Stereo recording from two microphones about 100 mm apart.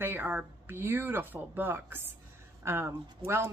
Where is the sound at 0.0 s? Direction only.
20° right (ahead or behind).